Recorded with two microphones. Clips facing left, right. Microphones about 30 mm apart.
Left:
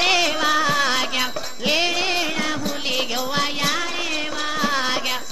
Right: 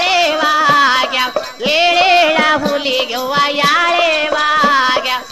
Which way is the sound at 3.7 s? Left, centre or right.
Right.